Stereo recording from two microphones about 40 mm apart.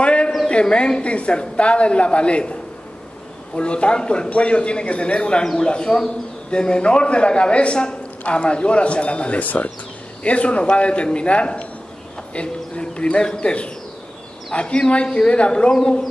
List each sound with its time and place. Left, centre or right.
0.0 s a sound: left
0.5 s a man's voice: left
9.4 s speech: left
10.2 s a man's voice: left